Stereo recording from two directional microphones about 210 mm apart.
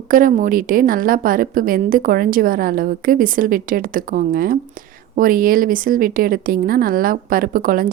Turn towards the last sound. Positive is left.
turn(degrees=-40)  # may be behind; listen again after turning